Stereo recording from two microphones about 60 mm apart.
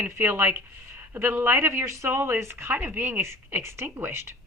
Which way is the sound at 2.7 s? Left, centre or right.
Right.